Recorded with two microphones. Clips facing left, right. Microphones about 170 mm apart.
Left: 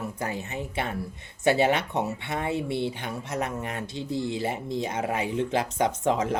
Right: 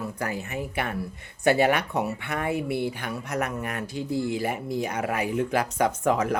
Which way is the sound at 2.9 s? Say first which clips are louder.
Right 1 dB; 25° left (ahead or behind).